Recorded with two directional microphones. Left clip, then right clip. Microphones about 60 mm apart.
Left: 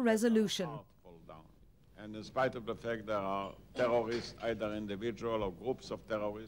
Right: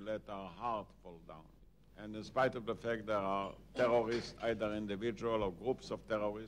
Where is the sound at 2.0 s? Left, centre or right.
Right.